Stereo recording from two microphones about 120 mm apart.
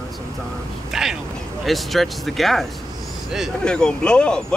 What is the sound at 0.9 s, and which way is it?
Speech, 5° right (ahead or behind).